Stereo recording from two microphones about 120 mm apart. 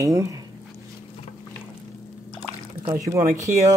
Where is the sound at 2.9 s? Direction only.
25° right (ahead or behind).